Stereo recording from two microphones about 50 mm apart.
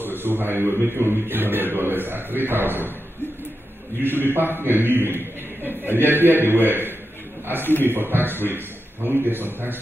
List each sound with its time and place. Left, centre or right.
0.0 s a man's voice: right
4.0 s a man's voice: right